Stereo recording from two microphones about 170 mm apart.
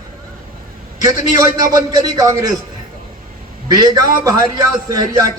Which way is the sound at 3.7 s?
20° right (ahead or behind).